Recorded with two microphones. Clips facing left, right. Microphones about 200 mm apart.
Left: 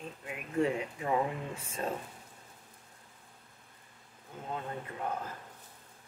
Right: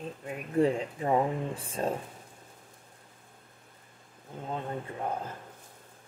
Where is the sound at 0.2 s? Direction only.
35° right (ahead or behind).